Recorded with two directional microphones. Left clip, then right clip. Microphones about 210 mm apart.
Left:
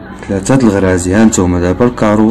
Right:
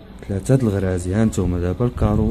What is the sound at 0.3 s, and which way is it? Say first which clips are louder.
Speech: left 10 dB; 35° right (ahead or behind).